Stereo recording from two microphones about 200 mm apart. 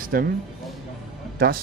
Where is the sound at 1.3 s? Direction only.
50° right (ahead or behind).